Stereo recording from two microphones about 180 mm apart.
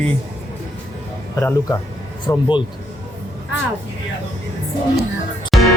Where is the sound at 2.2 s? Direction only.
25° left (ahead or behind).